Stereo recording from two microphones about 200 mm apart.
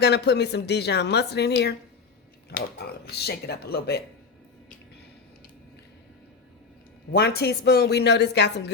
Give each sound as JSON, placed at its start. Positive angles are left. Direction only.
{"t": 0.0, "sound": "a woman's voice", "side_deg": 55}
{"t": 7.1, "sound": "a woman's voice", "side_deg": 55}